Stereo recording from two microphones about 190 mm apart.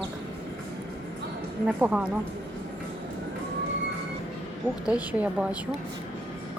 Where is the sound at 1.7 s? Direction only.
5° right (ahead or behind).